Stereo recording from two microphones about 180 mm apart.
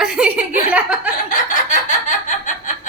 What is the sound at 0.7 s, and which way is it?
Chuckle, 5° right (ahead or behind).